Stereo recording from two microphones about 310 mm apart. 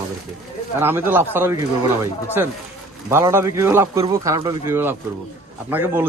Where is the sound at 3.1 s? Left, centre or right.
Centre.